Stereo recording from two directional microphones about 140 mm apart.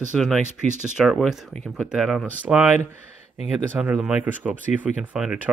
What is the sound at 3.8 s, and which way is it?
Speech, 5° right (ahead or behind).